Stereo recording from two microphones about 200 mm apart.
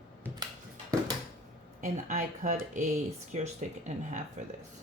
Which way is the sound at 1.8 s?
40° right (ahead or behind).